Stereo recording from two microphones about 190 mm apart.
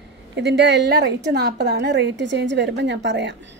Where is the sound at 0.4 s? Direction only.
65° right (ahead or behind).